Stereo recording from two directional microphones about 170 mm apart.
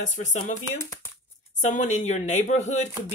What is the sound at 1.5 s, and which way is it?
Speech, 45° left (ahead or behind).